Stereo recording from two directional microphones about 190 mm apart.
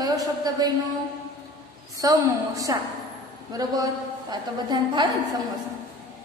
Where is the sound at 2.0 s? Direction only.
20° right (ahead or behind).